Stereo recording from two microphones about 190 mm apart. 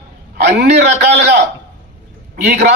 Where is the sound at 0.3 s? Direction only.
60° right (ahead or behind).